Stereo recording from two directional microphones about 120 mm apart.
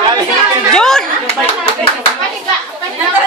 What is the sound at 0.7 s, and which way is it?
Chatter, 5° left (ahead or behind).